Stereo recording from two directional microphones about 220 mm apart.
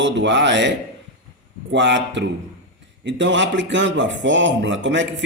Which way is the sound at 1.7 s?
55° right (ahead or behind).